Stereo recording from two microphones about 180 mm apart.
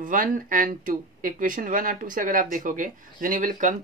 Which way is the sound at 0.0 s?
50° right (ahead or behind).